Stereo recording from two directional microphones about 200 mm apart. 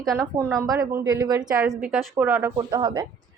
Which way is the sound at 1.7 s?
5° right (ahead or behind).